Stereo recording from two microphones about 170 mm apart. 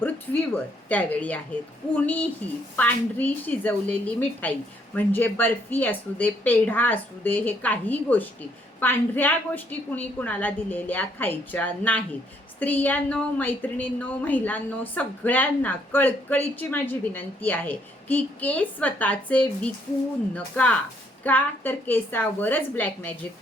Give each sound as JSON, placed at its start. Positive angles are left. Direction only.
{"t": 0.5, "sound": "a woman's voice", "side_deg": 10}